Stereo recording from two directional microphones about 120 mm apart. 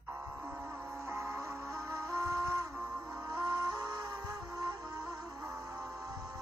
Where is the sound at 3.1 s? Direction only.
30° right (ahead or behind).